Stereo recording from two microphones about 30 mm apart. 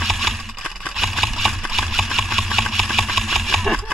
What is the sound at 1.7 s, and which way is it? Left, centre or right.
Engine, centre.